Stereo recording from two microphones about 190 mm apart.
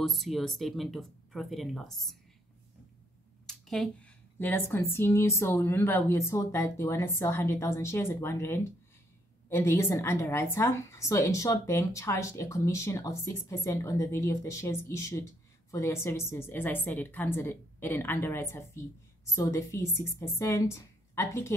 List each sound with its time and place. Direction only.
0.0 s speech: centre (ahead or behind)
3.4 s a woman's voice: centre (ahead or behind)